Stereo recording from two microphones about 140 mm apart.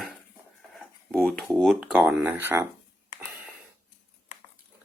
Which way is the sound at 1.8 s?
10° right (ahead or behind).